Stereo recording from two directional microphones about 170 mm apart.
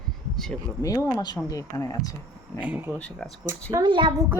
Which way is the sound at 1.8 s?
20° left (ahead or behind).